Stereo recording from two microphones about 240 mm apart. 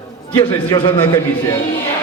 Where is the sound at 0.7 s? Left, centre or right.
Centre.